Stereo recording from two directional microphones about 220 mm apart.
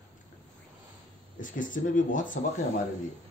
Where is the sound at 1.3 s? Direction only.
35° left (ahead or behind).